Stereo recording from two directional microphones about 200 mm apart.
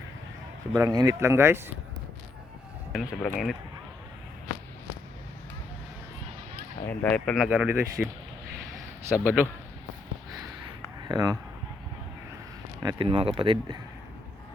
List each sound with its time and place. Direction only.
0.7 s speech: 20° right (ahead or behind)
2.9 s speech: centre (ahead or behind)
6.8 s speech: 5° left (ahead or behind)
11.1 s speech: 20° right (ahead or behind)
12.8 s speech: 25° right (ahead or behind)